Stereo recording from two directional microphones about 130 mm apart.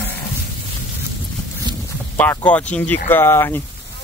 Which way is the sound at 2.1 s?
10° left (ahead or behind).